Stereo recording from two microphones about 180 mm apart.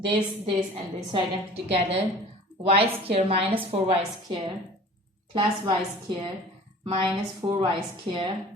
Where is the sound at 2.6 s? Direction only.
30° right (ahead or behind).